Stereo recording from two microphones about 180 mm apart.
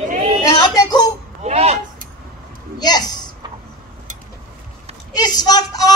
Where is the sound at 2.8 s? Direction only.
20° left (ahead or behind).